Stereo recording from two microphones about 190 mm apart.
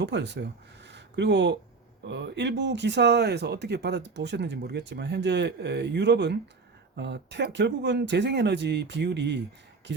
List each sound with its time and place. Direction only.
0.0 s speech: 65° right (ahead or behind)
0.9 s a sound: 65° right (ahead or behind)
2.0 s speech: 70° right (ahead or behind)